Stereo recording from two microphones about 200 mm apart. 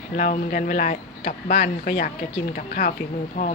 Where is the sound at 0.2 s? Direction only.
40° left (ahead or behind).